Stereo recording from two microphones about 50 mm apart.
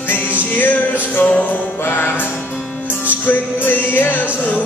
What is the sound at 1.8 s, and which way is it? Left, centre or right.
Music, left.